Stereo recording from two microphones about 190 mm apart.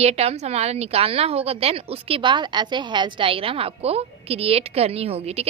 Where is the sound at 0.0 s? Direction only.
35° right (ahead or behind).